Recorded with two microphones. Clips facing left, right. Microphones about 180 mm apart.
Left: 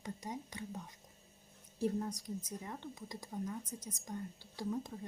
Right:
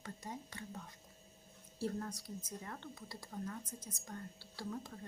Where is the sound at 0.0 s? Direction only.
15° left (ahead or behind).